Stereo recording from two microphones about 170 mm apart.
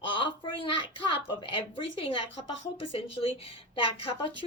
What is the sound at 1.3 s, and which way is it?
Speech, 30° left (ahead or behind).